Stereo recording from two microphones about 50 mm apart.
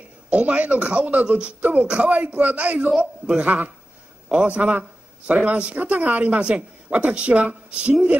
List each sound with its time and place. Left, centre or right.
0.3 s a man's voice: right